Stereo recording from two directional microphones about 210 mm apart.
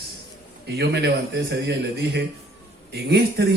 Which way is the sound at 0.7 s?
55° right (ahead or behind).